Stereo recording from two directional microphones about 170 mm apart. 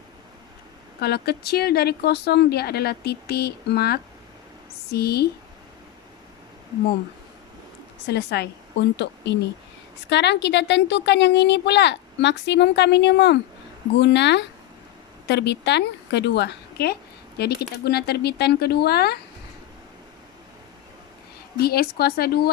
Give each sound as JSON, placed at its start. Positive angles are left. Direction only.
{"t": 1.0, "sound": "a woman's voice", "side_deg": 70}
{"t": 8.1, "sound": "a woman's voice", "side_deg": 75}
{"t": 21.5, "sound": "speech", "side_deg": 65}